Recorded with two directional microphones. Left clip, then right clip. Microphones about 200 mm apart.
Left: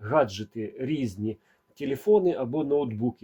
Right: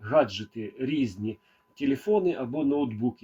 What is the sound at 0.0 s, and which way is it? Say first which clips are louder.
Speech: right 1 dB; 25° left (ahead or behind).